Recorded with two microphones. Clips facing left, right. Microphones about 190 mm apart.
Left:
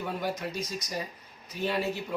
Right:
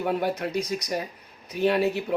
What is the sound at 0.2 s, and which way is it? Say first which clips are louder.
Speech: right 6 dB; 65° right (ahead or behind).